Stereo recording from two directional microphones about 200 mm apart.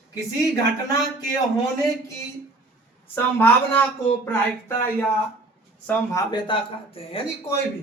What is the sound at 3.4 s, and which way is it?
Speech, 10° left (ahead or behind).